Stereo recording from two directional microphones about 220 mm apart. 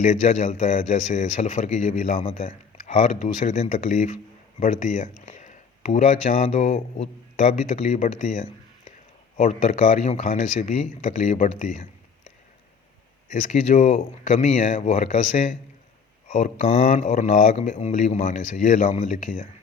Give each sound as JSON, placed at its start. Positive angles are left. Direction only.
{"t": 0.0, "sound": "speech", "side_deg": 35}
{"t": 13.3, "sound": "speech", "side_deg": 35}